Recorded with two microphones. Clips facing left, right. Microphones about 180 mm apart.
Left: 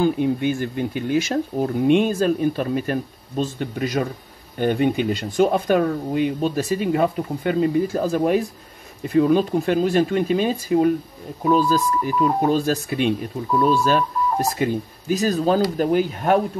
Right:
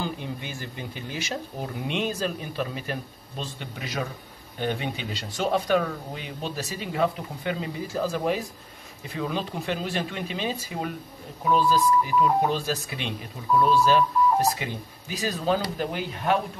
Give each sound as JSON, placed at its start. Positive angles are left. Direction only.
{"t": 0.0, "sound": "speech", "side_deg": 55}